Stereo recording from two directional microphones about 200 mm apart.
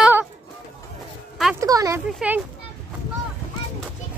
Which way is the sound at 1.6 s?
15° right (ahead or behind).